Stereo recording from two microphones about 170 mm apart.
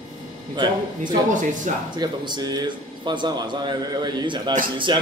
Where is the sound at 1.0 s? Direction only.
50° right (ahead or behind).